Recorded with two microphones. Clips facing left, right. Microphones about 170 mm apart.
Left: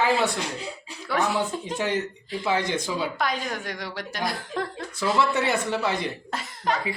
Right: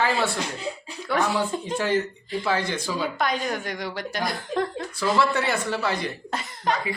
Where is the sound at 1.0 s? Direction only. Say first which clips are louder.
Right 1 dB; centre (ahead or behind).